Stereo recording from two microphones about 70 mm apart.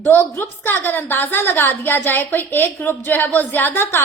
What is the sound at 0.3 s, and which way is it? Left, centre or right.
A woman's voice, left.